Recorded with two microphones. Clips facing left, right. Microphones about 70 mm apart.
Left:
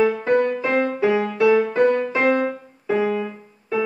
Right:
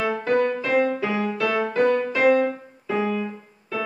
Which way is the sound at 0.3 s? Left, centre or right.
Left.